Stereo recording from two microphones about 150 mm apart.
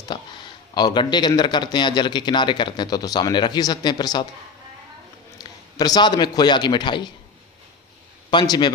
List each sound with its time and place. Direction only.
0.1 s a man's voice: 30° left (ahead or behind)
5.4 s a man's voice: 25° left (ahead or behind)
8.3 s a man's voice: 30° left (ahead or behind)